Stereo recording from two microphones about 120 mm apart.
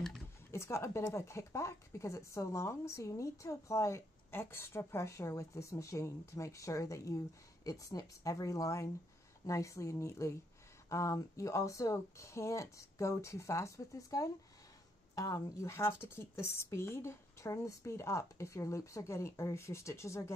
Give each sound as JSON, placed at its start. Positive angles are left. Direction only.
{"t": 0.5, "sound": "speech", "side_deg": 25}